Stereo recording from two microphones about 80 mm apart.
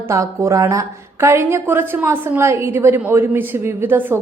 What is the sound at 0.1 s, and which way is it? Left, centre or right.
A woman's voice, right.